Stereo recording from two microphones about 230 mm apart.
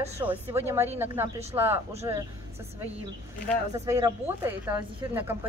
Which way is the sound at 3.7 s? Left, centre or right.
Centre.